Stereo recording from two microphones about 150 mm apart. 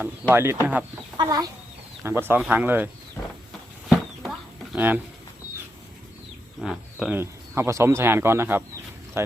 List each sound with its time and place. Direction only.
0.0 s speech: 15° right (ahead or behind)
1.1 s chicken: 30° right (ahead or behind)
2.0 s speech: 15° right (ahead or behind)
3.8 s a sound: centre (ahead or behind)
6.6 s speech: 5° right (ahead or behind)
7.2 s speech: 15° right (ahead or behind)